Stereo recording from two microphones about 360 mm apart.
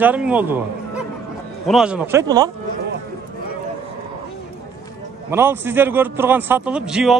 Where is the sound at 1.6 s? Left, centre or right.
Centre.